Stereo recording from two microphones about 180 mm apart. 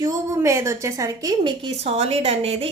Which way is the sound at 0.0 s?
15° right (ahead or behind).